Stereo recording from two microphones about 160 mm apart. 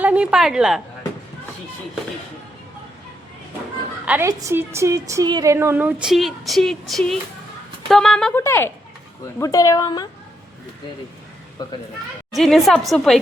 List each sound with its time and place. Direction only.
0.0 s a woman's voice: 10° right (ahead or behind)
4.0 s a woman's voice: 10° right (ahead or behind)
4.3 s a woman's voice: 20° right (ahead or behind); by 8.3 s centre (ahead or behind)
8.4 s speech: 15° left (ahead or behind)
11.6 s speech: 25° left (ahead or behind)
12.4 s a woman's voice: centre (ahead or behind)